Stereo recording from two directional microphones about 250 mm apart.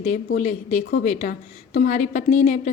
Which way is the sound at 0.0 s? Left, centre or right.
Left.